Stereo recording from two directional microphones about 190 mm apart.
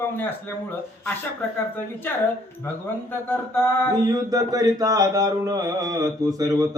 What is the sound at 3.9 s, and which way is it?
Mantra, 20° right (ahead or behind).